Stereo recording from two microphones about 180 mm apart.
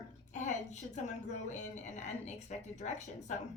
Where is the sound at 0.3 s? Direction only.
40° left (ahead or behind).